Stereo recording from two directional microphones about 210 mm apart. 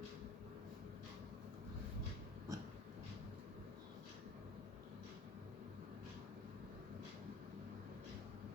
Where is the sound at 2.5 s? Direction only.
15° right (ahead or behind).